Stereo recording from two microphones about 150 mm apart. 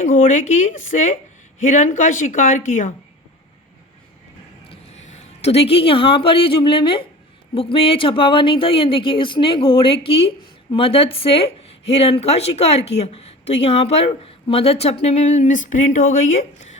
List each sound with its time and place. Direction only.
0.0 s speech: 55° left (ahead or behind)
4.7 s speech: 45° left (ahead or behind)